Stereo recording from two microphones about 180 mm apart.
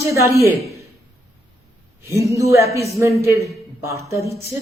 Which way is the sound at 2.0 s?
15° right (ahead or behind).